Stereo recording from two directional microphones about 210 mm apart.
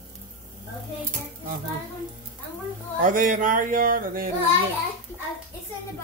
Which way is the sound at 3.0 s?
40° right (ahead or behind).